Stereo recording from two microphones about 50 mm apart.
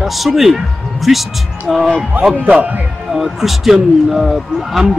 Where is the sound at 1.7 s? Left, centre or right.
Centre.